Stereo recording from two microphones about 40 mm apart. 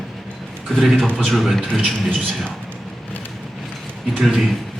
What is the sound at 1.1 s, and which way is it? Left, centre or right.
Speech, centre.